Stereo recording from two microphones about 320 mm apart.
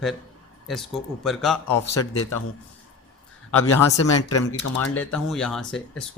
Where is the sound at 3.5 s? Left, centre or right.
Left.